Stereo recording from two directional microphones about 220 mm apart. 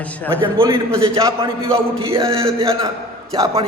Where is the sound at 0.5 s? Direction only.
15° right (ahead or behind).